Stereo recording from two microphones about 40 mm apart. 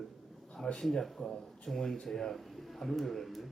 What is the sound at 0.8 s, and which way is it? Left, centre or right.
Speech, centre.